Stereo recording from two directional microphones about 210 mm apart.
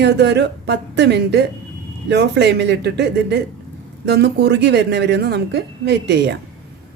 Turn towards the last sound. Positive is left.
turn(degrees=-55)  # may be behind; listen again after turning